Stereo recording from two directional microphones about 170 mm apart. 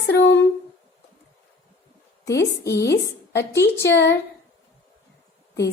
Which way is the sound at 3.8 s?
80° left.